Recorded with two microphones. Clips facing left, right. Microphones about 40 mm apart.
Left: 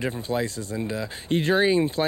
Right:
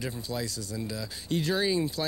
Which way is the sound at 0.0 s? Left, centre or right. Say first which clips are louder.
Left 7 dB; left.